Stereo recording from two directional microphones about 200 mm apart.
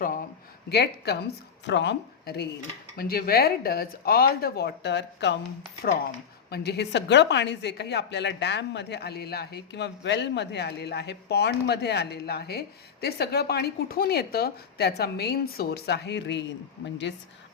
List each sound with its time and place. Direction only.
0.7 s speech: 55° left (ahead or behind)
6.5 s speech: 55° left (ahead or behind)